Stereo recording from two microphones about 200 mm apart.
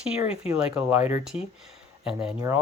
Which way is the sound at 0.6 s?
5° right (ahead or behind).